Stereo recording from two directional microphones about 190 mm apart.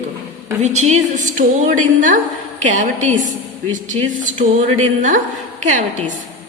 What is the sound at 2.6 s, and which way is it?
Speech, 40° right (ahead or behind).